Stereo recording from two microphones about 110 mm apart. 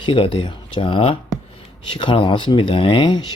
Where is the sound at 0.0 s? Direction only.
50° left (ahead or behind).